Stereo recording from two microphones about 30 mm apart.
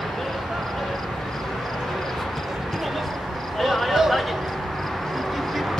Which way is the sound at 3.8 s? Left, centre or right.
Centre.